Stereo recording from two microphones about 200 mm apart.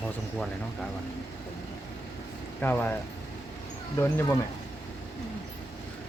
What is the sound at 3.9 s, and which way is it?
Speech, 10° left (ahead or behind).